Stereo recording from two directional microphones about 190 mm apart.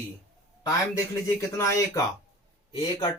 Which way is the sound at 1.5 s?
15° left (ahead or behind).